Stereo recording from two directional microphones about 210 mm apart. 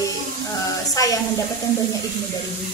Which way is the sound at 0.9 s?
15° left (ahead or behind).